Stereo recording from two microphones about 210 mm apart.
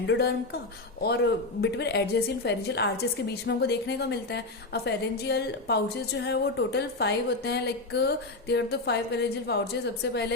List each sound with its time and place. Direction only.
0.1 s a woman's voice: 55° left (ahead or behind)